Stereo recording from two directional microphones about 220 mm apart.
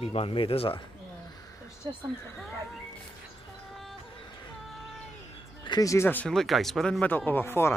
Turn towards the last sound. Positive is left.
turn(degrees=10)  # may be behind; listen again after turning